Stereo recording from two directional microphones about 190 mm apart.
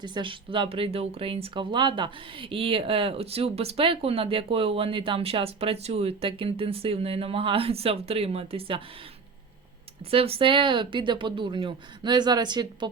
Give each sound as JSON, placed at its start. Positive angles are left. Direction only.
{"t": 0.0, "sound": "speech", "side_deg": -25}
{"t": 10.1, "sound": "speech", "side_deg": -30}